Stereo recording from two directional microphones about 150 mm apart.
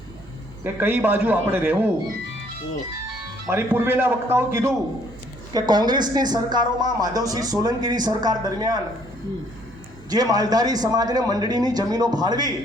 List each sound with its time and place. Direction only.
0.6 s a man's voice: 15° right (ahead or behind)
3.4 s a man's voice: 15° right (ahead or behind)
5.5 s a woman's voice: 30° right (ahead or behind)
10.1 s a woman's voice: 25° right (ahead or behind)